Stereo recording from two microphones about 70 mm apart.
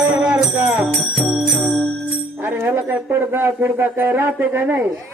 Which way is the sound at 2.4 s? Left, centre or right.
Right.